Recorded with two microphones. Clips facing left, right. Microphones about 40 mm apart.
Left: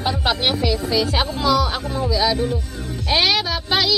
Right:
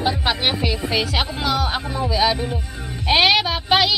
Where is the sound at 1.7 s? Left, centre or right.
Right.